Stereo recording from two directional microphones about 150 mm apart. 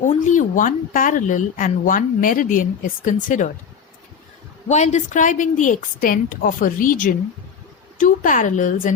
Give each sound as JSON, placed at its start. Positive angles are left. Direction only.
{"t": 0.0, "sound": "speech", "side_deg": 55}
{"t": 4.7, "sound": "speech", "side_deg": 50}